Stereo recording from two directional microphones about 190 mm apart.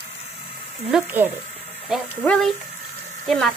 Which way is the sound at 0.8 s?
5° right (ahead or behind).